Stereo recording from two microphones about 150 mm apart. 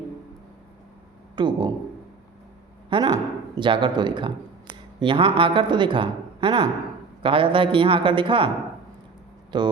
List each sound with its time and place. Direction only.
1.4 s a man's voice: 30° right (ahead or behind)
2.9 s a man's voice: 25° right (ahead or behind)
9.5 s a man's voice: 30° right (ahead or behind)